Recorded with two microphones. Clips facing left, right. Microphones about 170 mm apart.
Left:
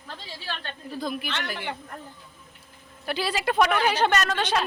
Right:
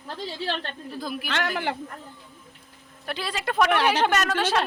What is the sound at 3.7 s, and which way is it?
Speech, 80° right.